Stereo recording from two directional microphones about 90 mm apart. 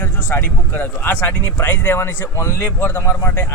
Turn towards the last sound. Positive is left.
turn(degrees=25)  # may be behind; listen again after turning